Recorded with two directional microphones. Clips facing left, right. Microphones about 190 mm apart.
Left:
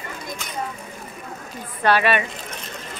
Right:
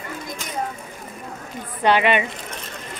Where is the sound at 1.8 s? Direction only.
20° right (ahead or behind).